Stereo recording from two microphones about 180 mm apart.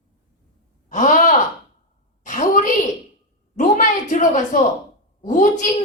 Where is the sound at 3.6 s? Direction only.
45° left (ahead or behind).